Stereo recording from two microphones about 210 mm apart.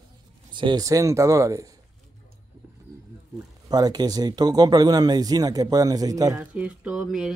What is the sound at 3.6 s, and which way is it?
Speech, 20° right (ahead or behind).